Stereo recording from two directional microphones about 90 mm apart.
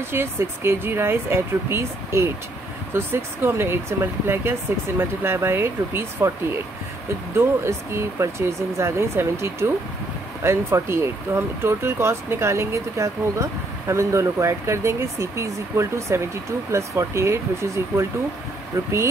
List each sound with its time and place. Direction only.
0.1 s speech: 30° right (ahead or behind)
7.3 s speech: 30° right (ahead or behind)